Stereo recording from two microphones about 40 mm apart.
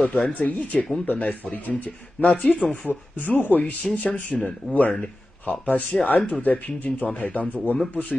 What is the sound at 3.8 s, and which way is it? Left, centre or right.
Speech, left.